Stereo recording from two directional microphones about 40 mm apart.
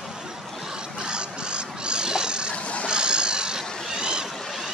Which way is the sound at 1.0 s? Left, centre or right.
Right.